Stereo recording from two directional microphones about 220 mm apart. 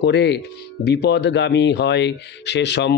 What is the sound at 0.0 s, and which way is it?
Speech, 50° left (ahead or behind).